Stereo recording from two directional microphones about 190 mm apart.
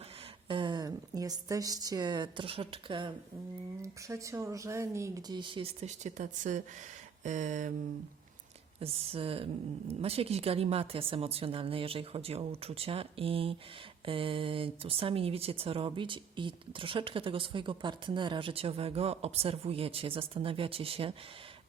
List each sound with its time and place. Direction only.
0.4 s a woman's voice: 25° right (ahead or behind)
3.8 s speech: 15° right (ahead or behind); by 6.6 s 40° right (ahead or behind)
7.3 s a sound: 40° right (ahead or behind)
8.8 s speech: 30° right (ahead or behind)